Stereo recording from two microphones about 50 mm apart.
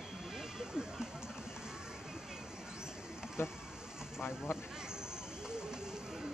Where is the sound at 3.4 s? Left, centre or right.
Left.